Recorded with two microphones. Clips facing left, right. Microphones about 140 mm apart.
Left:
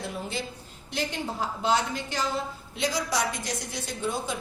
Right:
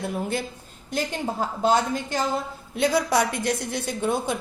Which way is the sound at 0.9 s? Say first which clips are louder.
Right 4 dB; 45° right (ahead or behind).